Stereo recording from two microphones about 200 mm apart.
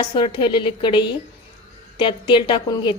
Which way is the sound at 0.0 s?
25° left (ahead or behind).